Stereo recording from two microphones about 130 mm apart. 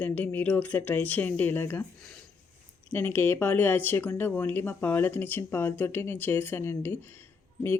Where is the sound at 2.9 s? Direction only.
15° left (ahead or behind).